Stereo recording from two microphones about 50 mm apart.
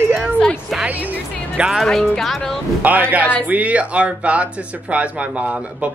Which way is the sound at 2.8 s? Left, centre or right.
Right.